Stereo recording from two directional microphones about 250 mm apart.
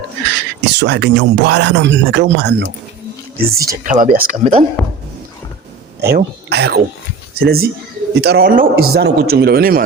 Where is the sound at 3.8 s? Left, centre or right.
Right.